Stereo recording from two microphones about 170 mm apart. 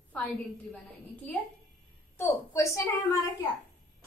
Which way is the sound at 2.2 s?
20° left (ahead or behind).